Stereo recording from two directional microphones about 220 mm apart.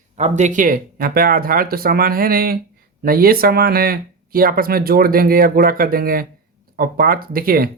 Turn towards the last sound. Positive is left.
turn(degrees=-40)  # may be behind; listen again after turning